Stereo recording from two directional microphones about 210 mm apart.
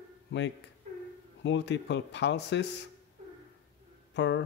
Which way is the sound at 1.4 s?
55° left (ahead or behind).